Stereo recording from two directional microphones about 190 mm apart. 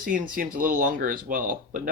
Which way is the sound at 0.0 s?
50° right (ahead or behind).